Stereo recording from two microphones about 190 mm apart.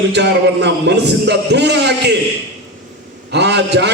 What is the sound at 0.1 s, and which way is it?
A man's voice, 65° right (ahead or behind).